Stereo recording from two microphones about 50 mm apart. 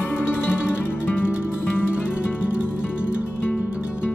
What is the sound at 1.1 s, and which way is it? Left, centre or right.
Music, left.